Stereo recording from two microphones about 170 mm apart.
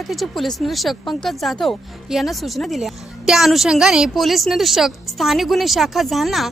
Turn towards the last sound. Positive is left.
turn(degrees=0)  # may be behind; listen again after turning